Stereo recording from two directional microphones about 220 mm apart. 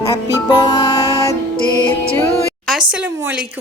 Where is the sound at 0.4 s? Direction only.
20° left (ahead or behind).